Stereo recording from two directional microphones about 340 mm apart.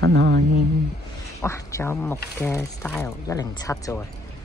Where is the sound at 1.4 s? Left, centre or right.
Centre.